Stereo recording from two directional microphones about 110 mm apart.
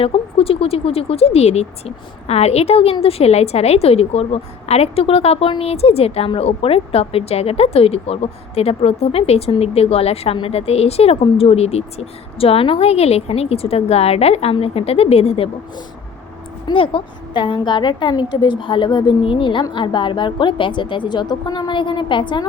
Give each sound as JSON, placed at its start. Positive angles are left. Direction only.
{"t": 0.0, "sound": "speech", "side_deg": 60}
{"t": 16.6, "sound": "a woman's voice", "side_deg": 50}